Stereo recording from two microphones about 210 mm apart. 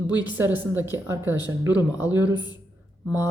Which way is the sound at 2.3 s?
20° left (ahead or behind).